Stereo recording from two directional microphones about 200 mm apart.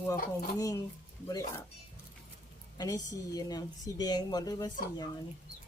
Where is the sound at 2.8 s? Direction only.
20° left (ahead or behind).